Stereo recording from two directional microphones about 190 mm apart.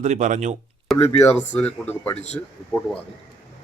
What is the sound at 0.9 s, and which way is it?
Speech, 10° left (ahead or behind).